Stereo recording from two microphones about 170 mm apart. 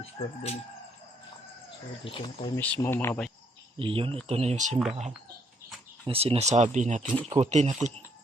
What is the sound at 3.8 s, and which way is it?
Speech, 30° right (ahead or behind).